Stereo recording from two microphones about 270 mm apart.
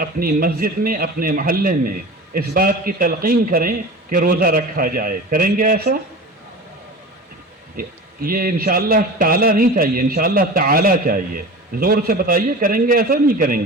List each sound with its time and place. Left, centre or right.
0.0 s a man's voice: right
7.8 s a man's voice: right